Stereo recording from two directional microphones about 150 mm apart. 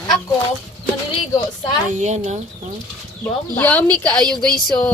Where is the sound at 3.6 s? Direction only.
10° left (ahead or behind).